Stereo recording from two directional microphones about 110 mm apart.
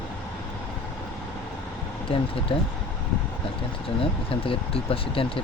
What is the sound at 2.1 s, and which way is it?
Speech, 55° left (ahead or behind).